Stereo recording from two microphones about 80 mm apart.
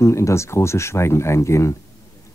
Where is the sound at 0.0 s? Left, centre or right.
Left.